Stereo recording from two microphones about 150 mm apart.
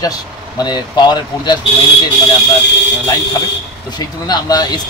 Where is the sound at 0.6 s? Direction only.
30° left (ahead or behind).